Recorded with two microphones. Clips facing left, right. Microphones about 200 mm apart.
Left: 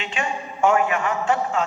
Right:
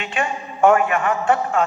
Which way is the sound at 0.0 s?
55° right (ahead or behind).